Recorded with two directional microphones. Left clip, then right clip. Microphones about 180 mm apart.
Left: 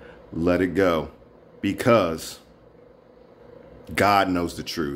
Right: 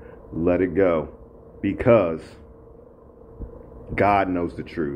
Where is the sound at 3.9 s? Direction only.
25° left (ahead or behind).